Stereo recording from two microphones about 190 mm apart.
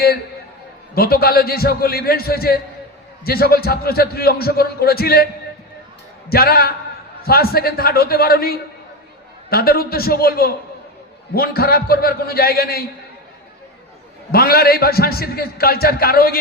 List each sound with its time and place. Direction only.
0.9 s a man's voice: 55° left (ahead or behind)
14.3 s a man's voice: 55° left (ahead or behind)